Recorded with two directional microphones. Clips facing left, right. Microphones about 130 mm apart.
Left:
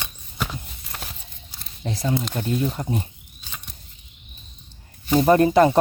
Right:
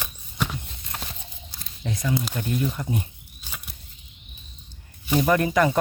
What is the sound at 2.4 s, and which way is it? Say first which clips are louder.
Speech: left 3 dB; 20° left (ahead or behind).